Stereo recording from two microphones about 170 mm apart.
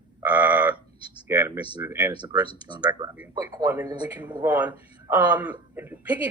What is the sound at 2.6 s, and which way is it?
Speech, 25° right (ahead or behind).